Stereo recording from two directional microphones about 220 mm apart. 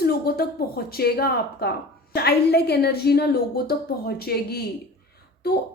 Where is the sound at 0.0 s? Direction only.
45° left (ahead or behind).